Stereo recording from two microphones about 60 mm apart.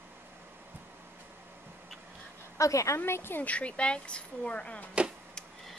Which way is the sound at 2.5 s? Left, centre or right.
Left.